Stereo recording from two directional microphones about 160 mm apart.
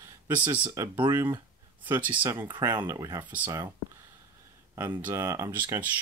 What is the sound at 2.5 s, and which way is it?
Speech, 25° right (ahead or behind).